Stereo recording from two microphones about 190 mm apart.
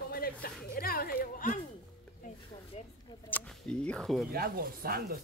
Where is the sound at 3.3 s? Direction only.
10° left (ahead or behind).